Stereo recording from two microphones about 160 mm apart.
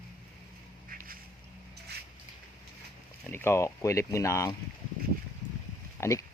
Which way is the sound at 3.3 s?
15° left (ahead or behind).